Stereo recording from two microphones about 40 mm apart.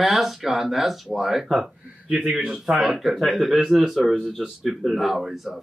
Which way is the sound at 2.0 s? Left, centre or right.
Centre.